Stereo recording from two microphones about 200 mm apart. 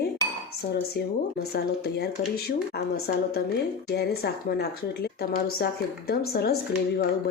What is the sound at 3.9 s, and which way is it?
Speech, 50° left (ahead or behind).